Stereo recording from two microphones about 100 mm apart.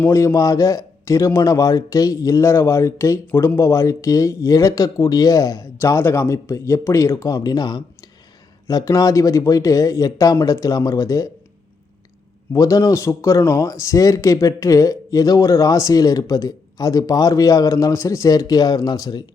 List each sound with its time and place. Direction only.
0.0 s speech: 25° left (ahead or behind)
12.5 s speech: 35° left (ahead or behind)